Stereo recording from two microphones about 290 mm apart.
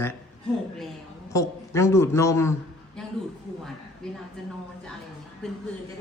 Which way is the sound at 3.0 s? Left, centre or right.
Centre.